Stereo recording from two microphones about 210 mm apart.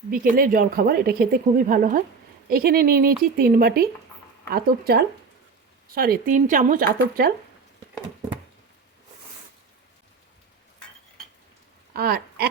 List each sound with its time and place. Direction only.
0.1 s speech: 40° right (ahead or behind)
11.9 s speech: 45° right (ahead or behind)